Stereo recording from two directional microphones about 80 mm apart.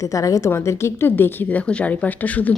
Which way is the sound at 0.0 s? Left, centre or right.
Left.